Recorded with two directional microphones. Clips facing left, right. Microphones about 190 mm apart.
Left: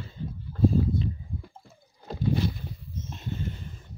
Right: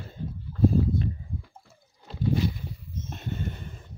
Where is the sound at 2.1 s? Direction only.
40° left (ahead or behind).